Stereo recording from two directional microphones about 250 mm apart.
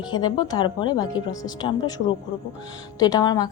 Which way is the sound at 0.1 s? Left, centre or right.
Centre.